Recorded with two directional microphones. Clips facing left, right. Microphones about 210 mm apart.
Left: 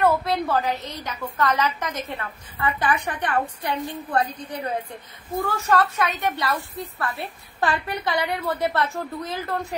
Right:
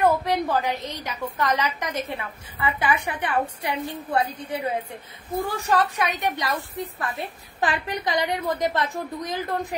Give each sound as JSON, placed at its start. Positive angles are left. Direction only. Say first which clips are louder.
{"t": 0.0, "sound": "a woman's voice", "louder": "even", "side_deg": -15}
{"t": 5.4, "sound": "a woman's voice", "louder": "left 1 dB", "side_deg": -15}